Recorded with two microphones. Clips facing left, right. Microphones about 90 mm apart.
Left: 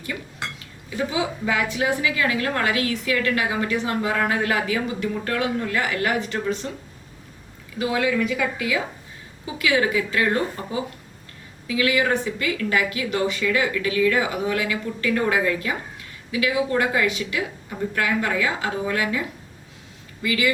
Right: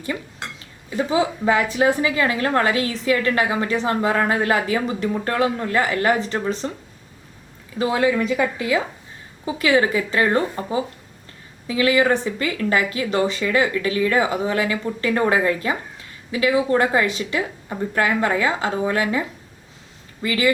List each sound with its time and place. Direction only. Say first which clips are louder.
1.1 s a woman's voice: right 7 dB; 35° right (ahead or behind)
7.8 s a woman's voice: right 3 dB; 30° right (ahead or behind)
20.2 s a woman's voice: right 2 dB; 35° right (ahead or behind)